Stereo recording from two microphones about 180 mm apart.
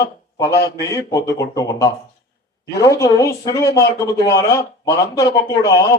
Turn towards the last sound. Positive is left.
turn(degrees=20)  # may be behind; listen again after turning